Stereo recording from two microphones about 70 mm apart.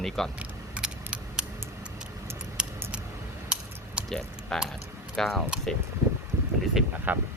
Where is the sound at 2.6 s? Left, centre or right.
Centre.